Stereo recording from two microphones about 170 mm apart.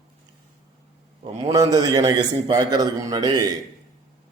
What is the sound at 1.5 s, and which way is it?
A man's voice, 20° right (ahead or behind).